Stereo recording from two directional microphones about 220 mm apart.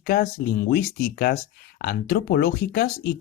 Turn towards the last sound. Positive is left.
turn(degrees=45)  # may be behind; listen again after turning